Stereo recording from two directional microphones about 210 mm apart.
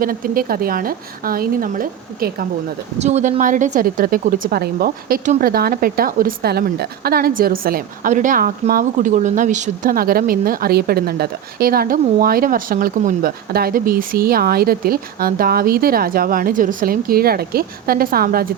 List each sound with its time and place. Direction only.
0.0 s speech: 45° right (ahead or behind)
3.0 s speech: 30° right (ahead or behind)